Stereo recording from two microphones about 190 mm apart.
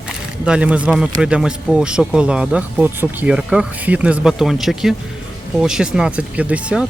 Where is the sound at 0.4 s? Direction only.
5° right (ahead or behind).